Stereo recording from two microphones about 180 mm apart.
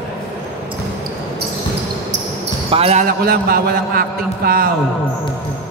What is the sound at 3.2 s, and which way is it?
A man's voice, 55° right (ahead or behind).